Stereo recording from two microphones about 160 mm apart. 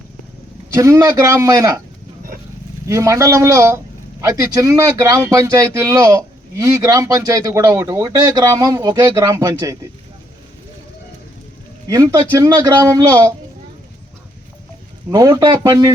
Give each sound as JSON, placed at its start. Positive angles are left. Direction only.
{"t": 0.8, "sound": "speech", "side_deg": -20}
{"t": 2.8, "sound": "speech", "side_deg": -20}
{"t": 11.9, "sound": "speech", "side_deg": -20}
{"t": 15.1, "sound": "speech", "side_deg": -25}